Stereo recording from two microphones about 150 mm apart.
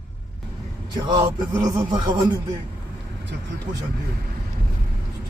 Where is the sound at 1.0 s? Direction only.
30° right (ahead or behind).